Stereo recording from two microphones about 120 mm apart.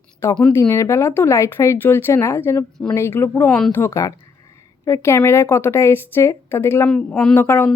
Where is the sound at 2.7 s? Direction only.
5° left (ahead or behind).